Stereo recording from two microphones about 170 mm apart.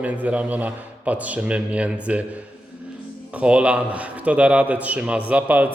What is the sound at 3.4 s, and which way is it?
A man's voice, 5° right (ahead or behind).